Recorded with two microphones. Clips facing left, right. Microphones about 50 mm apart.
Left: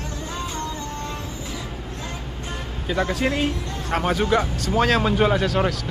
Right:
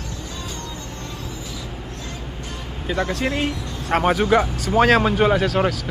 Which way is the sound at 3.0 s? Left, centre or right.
Centre.